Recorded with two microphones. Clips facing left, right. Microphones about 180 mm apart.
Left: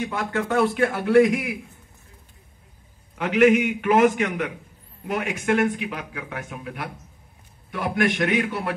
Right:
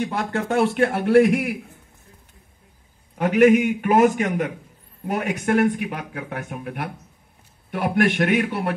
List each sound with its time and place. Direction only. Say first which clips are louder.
0.0 s speech: right 1 dB; 30° right (ahead or behind)
1.2 s a man's voice: right 2 dB; 60° right (ahead or behind)
3.3 s a man's voice: right 2 dB; 45° right (ahead or behind)